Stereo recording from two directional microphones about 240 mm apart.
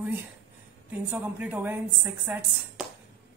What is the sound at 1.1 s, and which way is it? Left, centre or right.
A woman's voice, centre.